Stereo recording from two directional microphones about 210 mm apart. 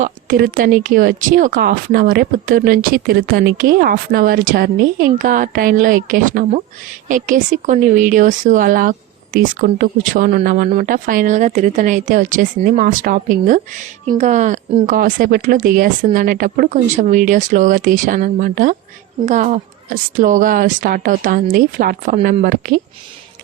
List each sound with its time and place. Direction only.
0.0 s speech: 40° right (ahead or behind)